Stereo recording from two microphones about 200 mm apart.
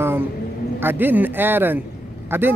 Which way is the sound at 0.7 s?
10° right (ahead or behind).